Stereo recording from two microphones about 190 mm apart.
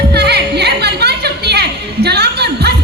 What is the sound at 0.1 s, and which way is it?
Music, 60° right (ahead or behind).